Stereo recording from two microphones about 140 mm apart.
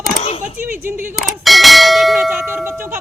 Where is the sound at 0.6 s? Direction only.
15° right (ahead or behind).